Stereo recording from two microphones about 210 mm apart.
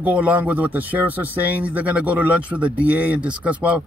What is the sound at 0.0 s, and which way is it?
Speech, 5° right (ahead or behind).